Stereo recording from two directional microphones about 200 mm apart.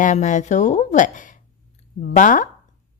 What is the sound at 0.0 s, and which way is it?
Speech, 40° left (ahead or behind).